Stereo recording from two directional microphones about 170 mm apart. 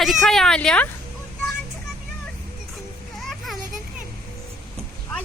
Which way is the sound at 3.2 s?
Centre (ahead or behind).